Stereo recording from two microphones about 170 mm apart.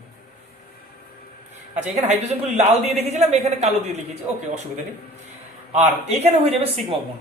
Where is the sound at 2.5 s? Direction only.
40° right (ahead or behind).